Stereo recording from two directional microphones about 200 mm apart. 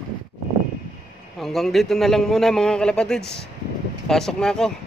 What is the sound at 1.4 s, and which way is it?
A man's voice, centre (ahead or behind).